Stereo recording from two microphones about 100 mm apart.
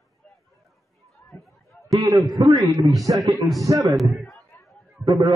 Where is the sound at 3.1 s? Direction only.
35° right (ahead or behind).